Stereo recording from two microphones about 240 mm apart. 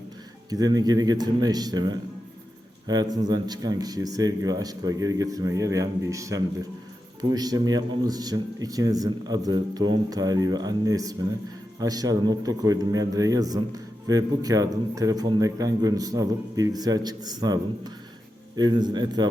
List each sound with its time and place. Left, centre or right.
0.5 s a man's voice: centre